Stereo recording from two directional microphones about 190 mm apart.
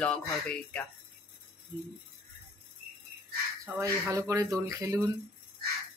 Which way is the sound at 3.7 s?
15° right (ahead or behind).